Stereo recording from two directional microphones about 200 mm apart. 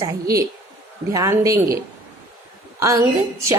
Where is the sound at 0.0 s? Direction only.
15° right (ahead or behind).